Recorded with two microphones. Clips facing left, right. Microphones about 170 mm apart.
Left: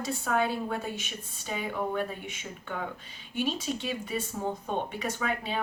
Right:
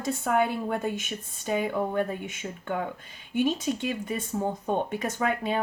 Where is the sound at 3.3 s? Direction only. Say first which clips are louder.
Right 5 dB; 50° right (ahead or behind).